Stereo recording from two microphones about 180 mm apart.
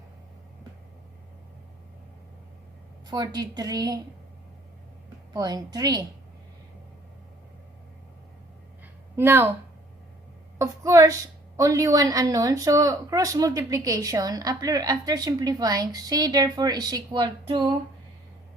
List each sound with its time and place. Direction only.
3.1 s a woman's voice: 20° right (ahead or behind)
5.3 s a woman's voice: 20° right (ahead or behind)
9.1 s a woman's voice: 10° right (ahead or behind)
10.6 s a woman's voice: 20° right (ahead or behind)